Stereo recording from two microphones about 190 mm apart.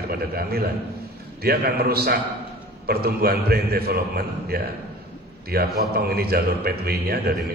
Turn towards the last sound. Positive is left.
turn(degrees=-55)  # may be behind; listen again after turning